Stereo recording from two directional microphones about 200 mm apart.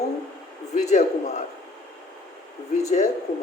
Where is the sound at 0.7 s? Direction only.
35° left (ahead or behind).